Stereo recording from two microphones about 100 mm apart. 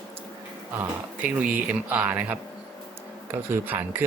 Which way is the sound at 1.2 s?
15° right (ahead or behind).